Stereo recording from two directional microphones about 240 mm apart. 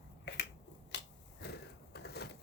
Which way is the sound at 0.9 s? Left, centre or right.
Left.